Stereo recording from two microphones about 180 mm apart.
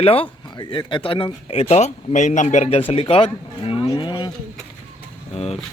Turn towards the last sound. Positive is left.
turn(degrees=35)  # may be behind; listen again after turning